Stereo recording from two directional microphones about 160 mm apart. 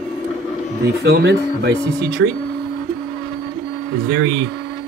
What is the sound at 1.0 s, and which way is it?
Speech, 90° right.